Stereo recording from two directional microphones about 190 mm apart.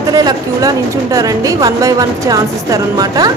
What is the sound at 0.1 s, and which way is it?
A woman's voice, 20° right (ahead or behind).